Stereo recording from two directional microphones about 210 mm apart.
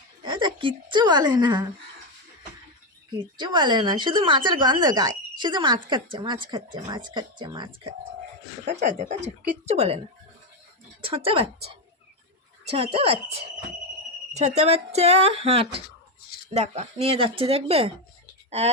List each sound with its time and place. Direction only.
0.3 s speech: 20° right (ahead or behind)
3.2 s speech: 20° right (ahead or behind)
8.7 s speech: 35° right (ahead or behind)
11.0 s speech: 25° right (ahead or behind)
12.7 s speech: 25° right (ahead or behind)